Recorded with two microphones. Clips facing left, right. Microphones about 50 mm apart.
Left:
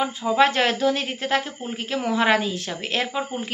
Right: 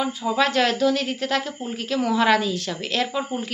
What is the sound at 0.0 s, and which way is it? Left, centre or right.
A woman's voice, left.